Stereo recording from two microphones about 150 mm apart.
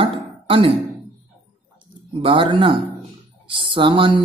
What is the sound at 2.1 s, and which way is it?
A woman's voice, 35° right (ahead or behind).